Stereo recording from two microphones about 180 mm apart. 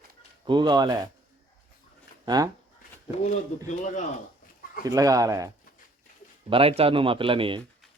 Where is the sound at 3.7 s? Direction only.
45° left (ahead or behind).